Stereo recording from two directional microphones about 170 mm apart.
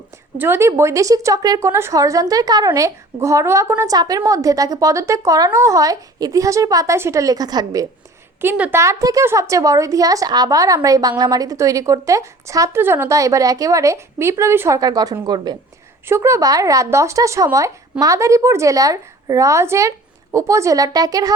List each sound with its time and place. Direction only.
0.3 s a woman's voice: 15° right (ahead or behind)
8.4 s a woman's voice: 10° right (ahead or behind)